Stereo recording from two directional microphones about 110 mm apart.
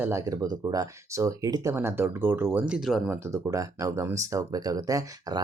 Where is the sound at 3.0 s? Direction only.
25° right (ahead or behind).